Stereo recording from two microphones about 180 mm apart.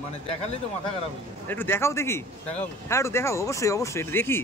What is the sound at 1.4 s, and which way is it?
A man's voice, 10° left (ahead or behind).